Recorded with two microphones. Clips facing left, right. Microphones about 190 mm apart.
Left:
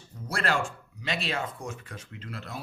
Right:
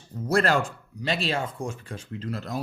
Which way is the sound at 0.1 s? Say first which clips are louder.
Right 7 dB; 40° right (ahead or behind).